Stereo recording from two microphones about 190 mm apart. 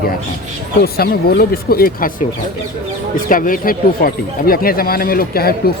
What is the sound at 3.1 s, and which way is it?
Speech, 45° left (ahead or behind).